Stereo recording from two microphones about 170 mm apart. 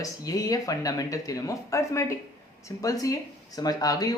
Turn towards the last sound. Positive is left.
turn(degrees=20)  # may be behind; listen again after turning